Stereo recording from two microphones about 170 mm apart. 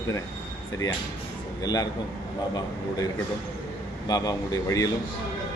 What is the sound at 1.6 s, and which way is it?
Speech, 25° left (ahead or behind).